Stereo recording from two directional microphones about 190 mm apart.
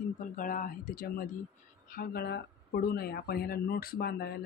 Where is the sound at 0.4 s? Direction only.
45° left (ahead or behind).